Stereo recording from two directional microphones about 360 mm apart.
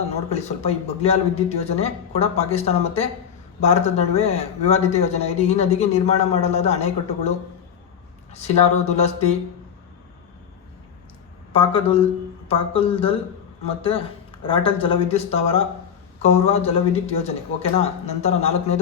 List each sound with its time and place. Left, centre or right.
0.3 s speech: centre
11.5 s speech: centre